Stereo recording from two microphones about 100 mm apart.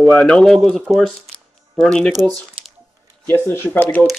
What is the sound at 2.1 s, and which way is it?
Speech, 40° right (ahead or behind).